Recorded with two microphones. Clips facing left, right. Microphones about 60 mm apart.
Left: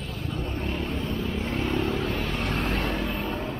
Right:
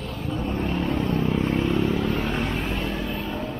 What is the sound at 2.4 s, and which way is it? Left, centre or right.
Vehicle, left.